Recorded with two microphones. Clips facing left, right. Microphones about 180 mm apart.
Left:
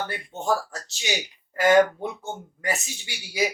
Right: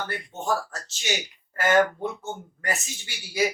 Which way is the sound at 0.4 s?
15° left (ahead or behind).